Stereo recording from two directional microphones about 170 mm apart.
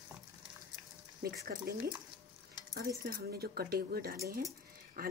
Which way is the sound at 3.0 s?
65° right (ahead or behind).